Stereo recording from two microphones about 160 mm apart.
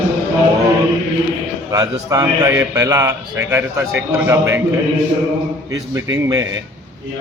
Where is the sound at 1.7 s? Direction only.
20° right (ahead or behind).